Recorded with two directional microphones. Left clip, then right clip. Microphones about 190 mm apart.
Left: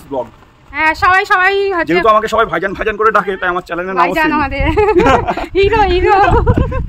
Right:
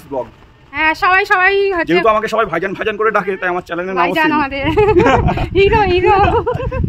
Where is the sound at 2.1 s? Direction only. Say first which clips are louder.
Left 3 dB; 20° left (ahead or behind).